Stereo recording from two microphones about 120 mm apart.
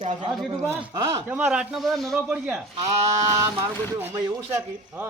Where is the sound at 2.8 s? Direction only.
30° right (ahead or behind).